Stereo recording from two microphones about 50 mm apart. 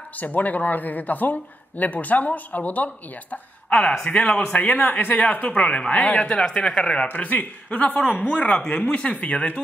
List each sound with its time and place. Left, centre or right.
0.2 s speech: left
5.6 s speech: left